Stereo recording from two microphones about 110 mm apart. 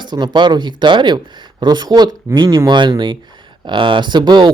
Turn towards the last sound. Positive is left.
turn(degrees=-40)  # may be behind; listen again after turning